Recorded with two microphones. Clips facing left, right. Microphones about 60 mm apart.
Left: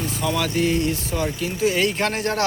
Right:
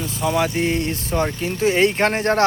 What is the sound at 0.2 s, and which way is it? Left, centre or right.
Speech, right.